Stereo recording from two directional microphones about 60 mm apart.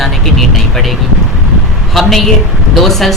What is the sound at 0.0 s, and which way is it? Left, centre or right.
A woman's voice, centre.